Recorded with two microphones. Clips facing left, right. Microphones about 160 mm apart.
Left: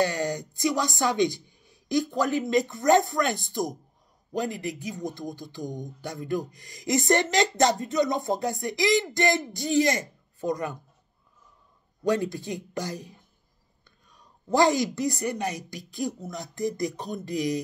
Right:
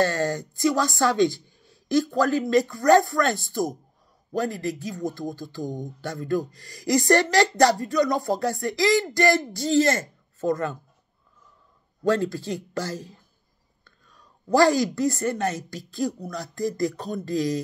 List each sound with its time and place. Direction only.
0.0 s speech: 15° left (ahead or behind)
12.0 s a woman's voice: 15° left (ahead or behind)